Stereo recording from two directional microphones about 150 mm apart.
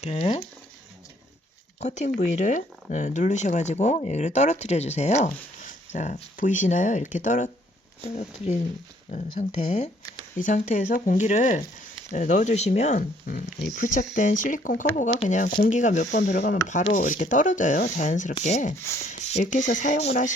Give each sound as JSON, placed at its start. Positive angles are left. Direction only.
{"t": 0.0, "sound": "speech", "side_deg": 45}
{"t": 1.8, "sound": "speech", "side_deg": 55}
{"t": 8.0, "sound": "speech", "side_deg": 45}
{"t": 13.3, "sound": "speech", "side_deg": 70}
{"t": 15.1, "sound": "speech", "side_deg": 40}
{"t": 15.6, "sound": "speech", "side_deg": 55}
{"t": 18.8, "sound": "speech", "side_deg": 20}
{"t": 19.2, "sound": "speech", "side_deg": 50}